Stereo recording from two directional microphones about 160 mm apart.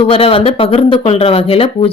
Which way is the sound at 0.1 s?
35° left (ahead or behind).